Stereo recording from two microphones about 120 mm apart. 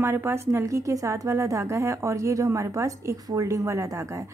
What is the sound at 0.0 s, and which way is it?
A woman's voice, 20° right (ahead or behind).